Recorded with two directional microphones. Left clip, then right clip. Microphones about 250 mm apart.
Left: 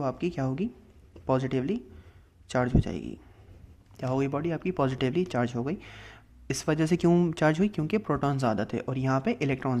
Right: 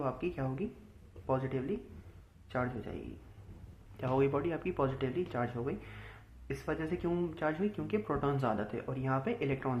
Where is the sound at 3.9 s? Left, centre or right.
Left.